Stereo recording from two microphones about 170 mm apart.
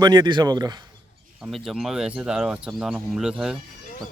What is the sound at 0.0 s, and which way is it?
Speech, 25° right (ahead or behind).